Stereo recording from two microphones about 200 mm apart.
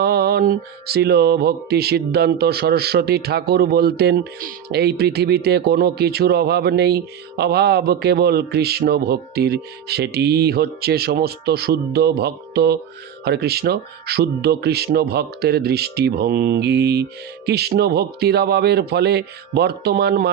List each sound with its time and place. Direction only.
0.0 s mantra: 50° right (ahead or behind)